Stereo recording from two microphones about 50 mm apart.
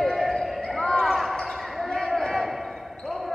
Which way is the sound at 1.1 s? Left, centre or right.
Centre.